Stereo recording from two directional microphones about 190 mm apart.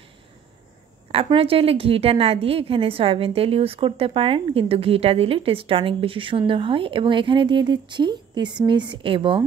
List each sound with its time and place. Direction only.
1.1 s a woman's voice: 30° right (ahead or behind)